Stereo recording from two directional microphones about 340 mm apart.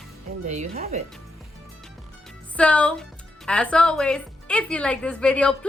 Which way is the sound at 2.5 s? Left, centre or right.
Centre.